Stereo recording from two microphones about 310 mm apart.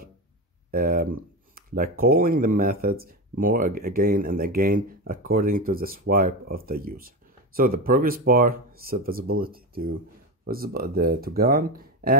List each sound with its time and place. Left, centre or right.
0.7 s speech: right